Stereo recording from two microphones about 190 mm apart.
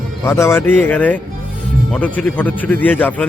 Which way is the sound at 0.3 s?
15° left (ahead or behind).